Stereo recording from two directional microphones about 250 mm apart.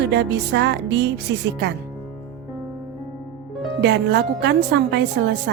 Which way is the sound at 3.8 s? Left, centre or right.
Right.